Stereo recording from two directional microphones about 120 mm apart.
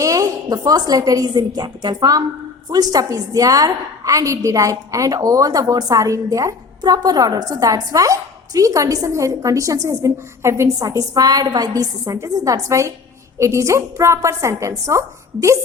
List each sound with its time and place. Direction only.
0.0 s a woman's voice: 30° right (ahead or behind)